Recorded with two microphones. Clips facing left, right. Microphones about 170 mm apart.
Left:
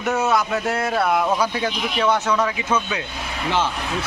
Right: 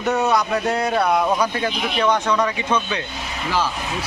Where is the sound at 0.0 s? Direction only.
Centre (ahead or behind).